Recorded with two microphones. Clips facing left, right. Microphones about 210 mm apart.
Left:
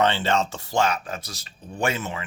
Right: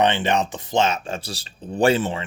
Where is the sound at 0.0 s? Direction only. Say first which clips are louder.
Right 2 dB; 20° right (ahead or behind).